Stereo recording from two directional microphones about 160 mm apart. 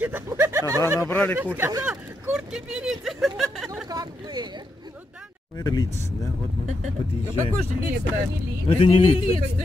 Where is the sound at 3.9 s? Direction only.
25° right (ahead or behind).